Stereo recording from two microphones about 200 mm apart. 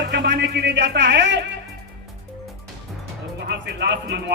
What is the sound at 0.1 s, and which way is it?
Speech, 60° right (ahead or behind).